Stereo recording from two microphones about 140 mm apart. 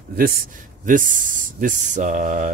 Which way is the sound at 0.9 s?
70° right (ahead or behind).